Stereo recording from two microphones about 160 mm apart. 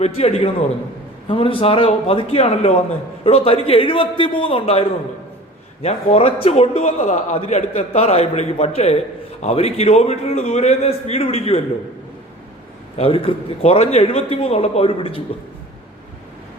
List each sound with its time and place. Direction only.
0.0 s a man's voice: 40° left (ahead or behind)
13.0 s a man's voice: 35° left (ahead or behind)